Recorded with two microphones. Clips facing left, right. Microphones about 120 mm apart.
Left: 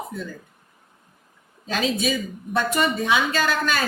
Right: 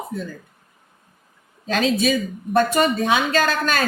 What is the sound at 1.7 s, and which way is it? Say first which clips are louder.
A woman's voice: right 4 dB; 50° right (ahead or behind).